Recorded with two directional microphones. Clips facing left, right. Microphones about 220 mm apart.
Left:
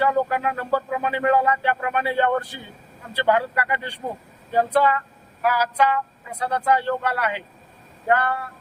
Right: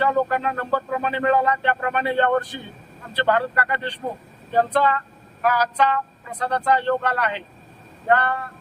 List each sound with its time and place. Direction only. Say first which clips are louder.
0.0 s speech: even; 10° left (ahead or behind)